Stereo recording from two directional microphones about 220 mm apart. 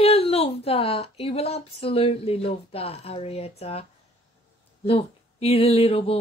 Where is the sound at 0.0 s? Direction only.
25° left (ahead or behind).